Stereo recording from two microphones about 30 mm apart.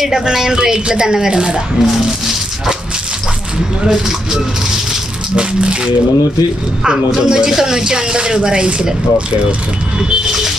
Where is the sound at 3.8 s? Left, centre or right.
Centre.